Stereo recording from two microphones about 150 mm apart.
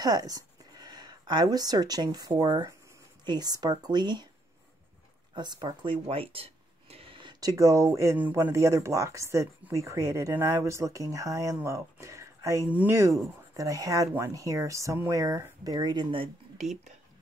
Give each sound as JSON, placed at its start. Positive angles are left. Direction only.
{"t": 0.0, "sound": "speech", "side_deg": -25}
{"t": 5.3, "sound": "speech", "side_deg": -30}